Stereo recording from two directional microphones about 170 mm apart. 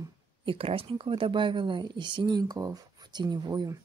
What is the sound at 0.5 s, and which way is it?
Speech, 30° right (ahead or behind).